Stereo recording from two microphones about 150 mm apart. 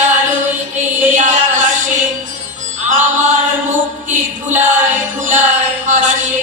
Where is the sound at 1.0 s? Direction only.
55° right (ahead or behind).